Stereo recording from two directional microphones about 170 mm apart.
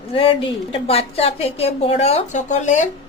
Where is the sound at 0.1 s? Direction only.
30° left (ahead or behind).